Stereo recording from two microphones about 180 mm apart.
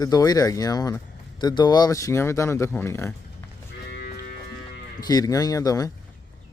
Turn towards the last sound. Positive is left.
turn(degrees=20)  # may be behind; listen again after turning